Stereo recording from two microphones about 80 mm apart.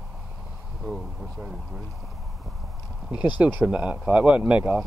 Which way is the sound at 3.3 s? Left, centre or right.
Centre.